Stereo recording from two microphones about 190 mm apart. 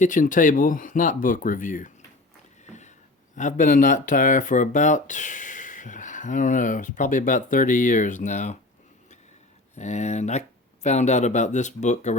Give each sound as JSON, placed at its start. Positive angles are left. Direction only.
{"t": 0.0, "sound": "speech", "side_deg": 45}
{"t": 3.3, "sound": "speech", "side_deg": 40}
{"t": 9.7, "sound": "speech", "side_deg": 35}